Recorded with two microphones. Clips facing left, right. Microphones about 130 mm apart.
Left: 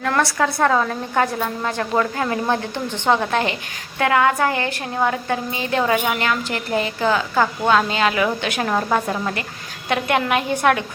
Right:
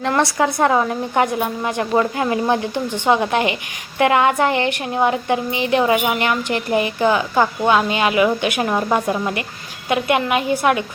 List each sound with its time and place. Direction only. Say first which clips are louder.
0.0 s a woman's voice: right 2 dB; 25° right (ahead or behind); by 10.8 s 5° right (ahead or behind)